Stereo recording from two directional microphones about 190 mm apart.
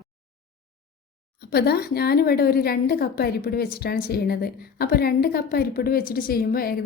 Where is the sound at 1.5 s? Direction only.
55° left (ahead or behind).